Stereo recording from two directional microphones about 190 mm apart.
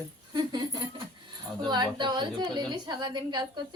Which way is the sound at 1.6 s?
20° right (ahead or behind).